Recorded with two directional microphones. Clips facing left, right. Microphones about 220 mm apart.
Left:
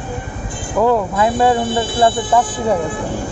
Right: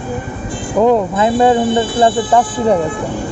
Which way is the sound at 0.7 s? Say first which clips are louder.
Right 3 dB; 20° right (ahead or behind).